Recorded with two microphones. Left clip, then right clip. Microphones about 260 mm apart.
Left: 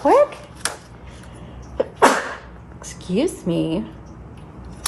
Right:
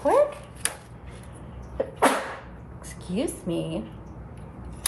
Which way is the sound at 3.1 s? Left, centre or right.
Left.